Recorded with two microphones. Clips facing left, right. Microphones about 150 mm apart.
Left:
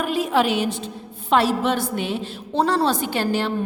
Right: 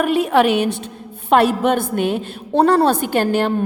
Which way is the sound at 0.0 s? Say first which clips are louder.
Right 5 dB; 65° right (ahead or behind).